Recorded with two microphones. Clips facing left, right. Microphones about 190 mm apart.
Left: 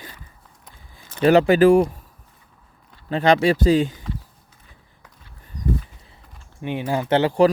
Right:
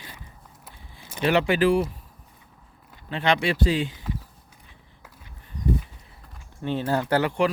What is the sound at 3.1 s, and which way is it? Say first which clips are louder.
Speech: left 7 dB; 40° left (ahead or behind).